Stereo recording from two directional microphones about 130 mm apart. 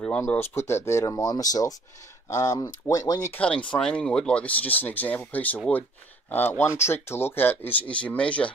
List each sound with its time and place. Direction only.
0.2 s speech: 20° left (ahead or behind)
1.1 s speech: 30° left (ahead or behind)
3.3 s speech: 10° left (ahead or behind)